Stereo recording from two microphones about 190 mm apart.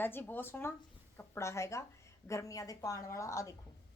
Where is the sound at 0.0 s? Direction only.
10° left (ahead or behind).